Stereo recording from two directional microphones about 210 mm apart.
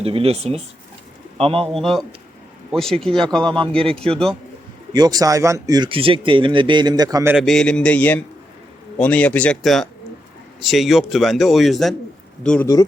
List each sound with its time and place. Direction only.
0.0 s a man's voice: 30° right (ahead or behind)
1.6 s a man's voice: centre (ahead or behind)
4.9 s speech: 20° right (ahead or behind)
7.3 s a man's voice: centre (ahead or behind)